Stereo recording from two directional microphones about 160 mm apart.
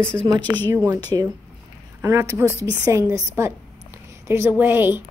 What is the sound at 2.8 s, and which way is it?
A woman's voice, 20° right (ahead or behind).